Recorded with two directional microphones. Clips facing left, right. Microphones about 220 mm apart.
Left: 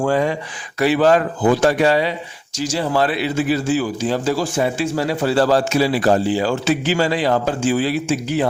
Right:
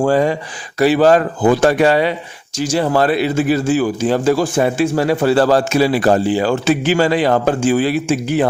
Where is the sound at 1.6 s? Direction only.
55° right (ahead or behind).